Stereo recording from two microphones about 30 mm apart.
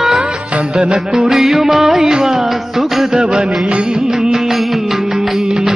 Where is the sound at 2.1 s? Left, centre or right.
Right.